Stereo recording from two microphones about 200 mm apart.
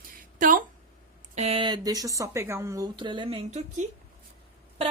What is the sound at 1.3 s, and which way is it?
A woman's voice, 30° right (ahead or behind).